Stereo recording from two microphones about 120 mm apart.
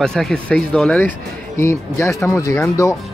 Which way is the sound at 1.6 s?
25° left (ahead or behind).